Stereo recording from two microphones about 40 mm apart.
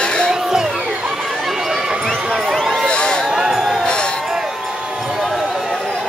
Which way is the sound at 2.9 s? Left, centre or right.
Left.